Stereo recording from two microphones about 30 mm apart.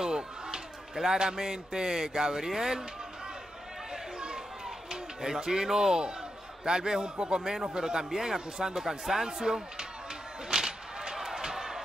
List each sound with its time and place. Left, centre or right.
0.0 s a man's voice: right
5.2 s a man's voice: right
10.5 s artillery fire: centre
11.1 s a sound: centre